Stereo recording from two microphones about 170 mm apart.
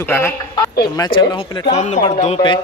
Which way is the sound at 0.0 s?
10° left (ahead or behind).